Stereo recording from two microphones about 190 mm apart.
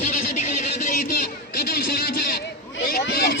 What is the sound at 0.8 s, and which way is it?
Music, 45° left (ahead or behind).